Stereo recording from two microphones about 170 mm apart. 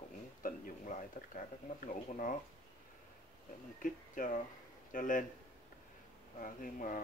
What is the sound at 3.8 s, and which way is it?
Speech, 50° left (ahead or behind).